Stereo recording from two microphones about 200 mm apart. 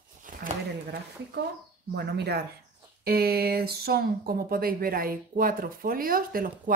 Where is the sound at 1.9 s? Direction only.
55° right (ahead or behind).